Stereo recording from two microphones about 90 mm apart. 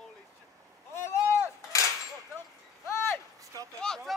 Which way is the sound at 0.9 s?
30° left (ahead or behind).